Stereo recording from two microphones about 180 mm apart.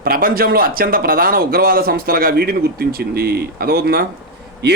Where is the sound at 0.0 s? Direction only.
55° right (ahead or behind).